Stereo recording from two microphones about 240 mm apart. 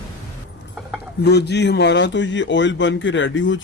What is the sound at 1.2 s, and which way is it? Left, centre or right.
A man's voice, left.